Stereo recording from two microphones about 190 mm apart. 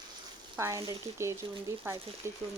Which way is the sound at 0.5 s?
15° right (ahead or behind).